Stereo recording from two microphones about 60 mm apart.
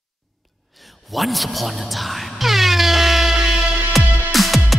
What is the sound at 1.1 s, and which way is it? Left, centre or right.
Air horn, centre.